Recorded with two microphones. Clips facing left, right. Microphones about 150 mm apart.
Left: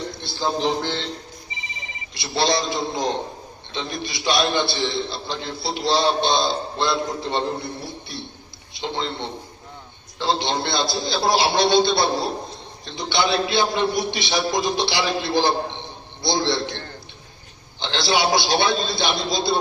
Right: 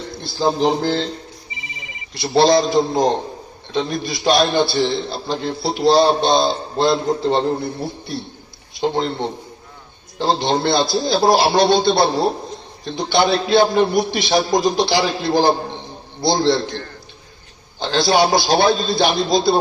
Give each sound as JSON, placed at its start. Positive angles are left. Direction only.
{"t": 0.3, "sound": "a man's voice", "side_deg": -35}
{"t": 2.1, "sound": "a man's voice", "side_deg": -40}
{"t": 8.8, "sound": "a man's voice", "side_deg": -45}